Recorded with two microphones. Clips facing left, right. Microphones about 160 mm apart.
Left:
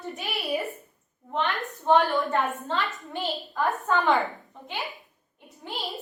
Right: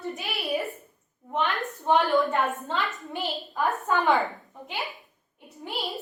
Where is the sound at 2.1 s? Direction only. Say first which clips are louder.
Right 2 dB; 20° right (ahead or behind).